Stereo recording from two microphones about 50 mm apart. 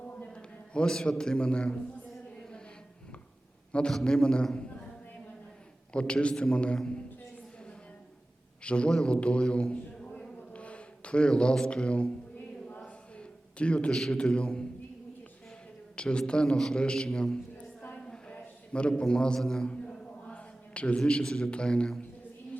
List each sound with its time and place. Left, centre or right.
0.3 s a sound: centre
1.2 s a man's voice: centre
3.7 s a man's voice: centre
5.9 s a man's voice: left
8.6 s a man's voice: left
8.9 s a man's voice: centre
9.1 s a sound: left
11.7 s a man's voice: left
12.8 s a sound: left
13.9 s a man's voice: centre
16.0 s a man's voice: centre
17.9 s a sound: centre
18.3 s a man's voice: left
20.2 s a man's voice: left